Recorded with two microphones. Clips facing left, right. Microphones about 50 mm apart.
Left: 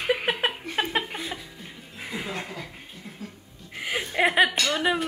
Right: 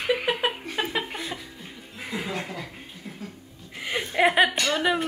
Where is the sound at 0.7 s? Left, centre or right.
Left.